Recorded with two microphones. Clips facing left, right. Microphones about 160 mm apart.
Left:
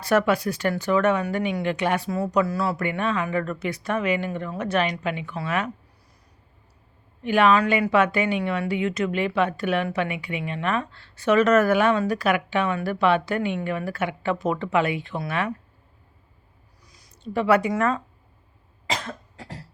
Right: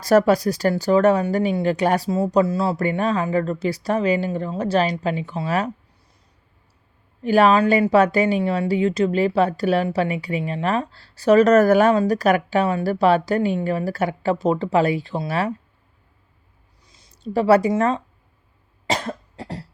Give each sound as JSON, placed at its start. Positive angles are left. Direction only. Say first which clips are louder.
{"t": 0.0, "sound": "a woman's voice", "louder": "right 5 dB", "side_deg": -40}
{"t": 2.0, "sound": "a woman's voice", "louder": "right 4 dB", "side_deg": -25}
{"t": 7.2, "sound": "a woman's voice", "louder": "right 3 dB", "side_deg": -35}
{"t": 16.8, "sound": "a sound", "louder": "even", "side_deg": -25}
{"t": 17.2, "sound": "a woman's voice", "louder": "right 4 dB", "side_deg": -35}
{"t": 18.9, "sound": "cough", "louder": "right 6 dB", "side_deg": -35}